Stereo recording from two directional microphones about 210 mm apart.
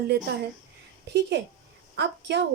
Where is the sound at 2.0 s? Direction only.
55° right (ahead or behind).